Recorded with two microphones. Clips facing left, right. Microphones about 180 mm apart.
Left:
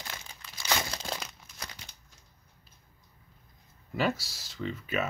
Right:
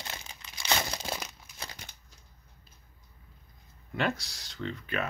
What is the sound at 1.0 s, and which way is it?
Crumpling, 10° right (ahead or behind).